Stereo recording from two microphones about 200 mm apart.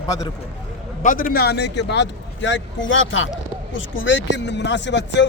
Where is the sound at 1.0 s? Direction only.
45° left (ahead or behind).